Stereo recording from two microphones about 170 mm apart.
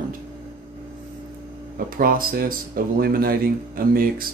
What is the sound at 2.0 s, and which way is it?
Speech, 60° right (ahead or behind).